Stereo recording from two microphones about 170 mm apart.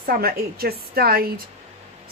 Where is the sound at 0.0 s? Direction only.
60° right (ahead or behind).